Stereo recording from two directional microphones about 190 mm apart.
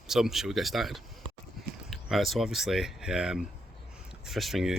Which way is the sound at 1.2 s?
25° right (ahead or behind).